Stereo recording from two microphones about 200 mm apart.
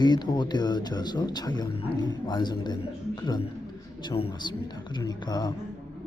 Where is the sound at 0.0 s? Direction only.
20° left (ahead or behind).